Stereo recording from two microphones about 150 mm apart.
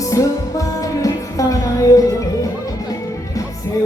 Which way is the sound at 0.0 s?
20° left (ahead or behind).